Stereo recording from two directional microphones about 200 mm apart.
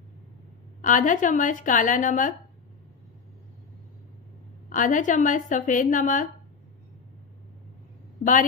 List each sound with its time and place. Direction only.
0.8 s a woman's voice: 40° left (ahead or behind)
4.6 s a woman's voice: 40° left (ahead or behind)